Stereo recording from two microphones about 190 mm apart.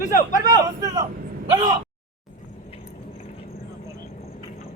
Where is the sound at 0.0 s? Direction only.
45° left (ahead or behind).